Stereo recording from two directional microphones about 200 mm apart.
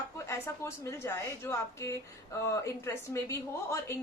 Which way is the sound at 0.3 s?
15° left (ahead or behind).